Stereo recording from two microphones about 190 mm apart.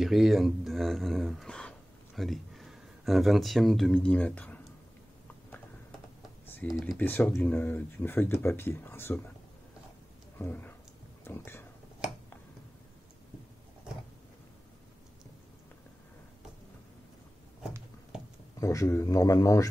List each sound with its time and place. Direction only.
0.0 s speech: centre (ahead or behind)
6.4 s computer keyboard: 10° left (ahead or behind)
6.9 s speech: 10° left (ahead or behind)
10.4 s speech: 10° left (ahead or behind)
18.6 s speech: 15° left (ahead or behind)